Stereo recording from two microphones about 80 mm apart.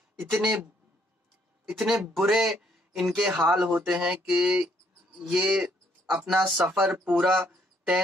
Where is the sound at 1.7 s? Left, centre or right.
Centre.